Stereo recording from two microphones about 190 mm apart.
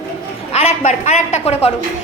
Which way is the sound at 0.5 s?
35° left (ahead or behind).